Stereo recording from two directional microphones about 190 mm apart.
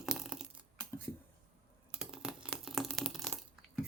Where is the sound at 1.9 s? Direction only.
5° right (ahead or behind).